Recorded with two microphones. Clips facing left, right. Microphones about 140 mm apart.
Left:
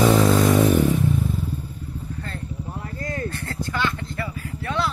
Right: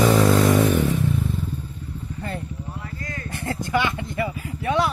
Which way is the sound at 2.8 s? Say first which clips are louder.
Left 5 dB; 40° left (ahead or behind).